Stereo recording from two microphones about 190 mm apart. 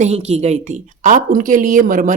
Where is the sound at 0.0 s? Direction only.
35° right (ahead or behind).